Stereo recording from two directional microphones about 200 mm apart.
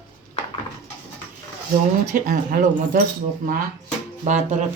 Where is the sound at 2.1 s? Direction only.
45° right (ahead or behind).